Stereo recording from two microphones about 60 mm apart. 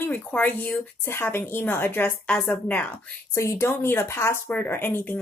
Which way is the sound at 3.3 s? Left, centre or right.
Left.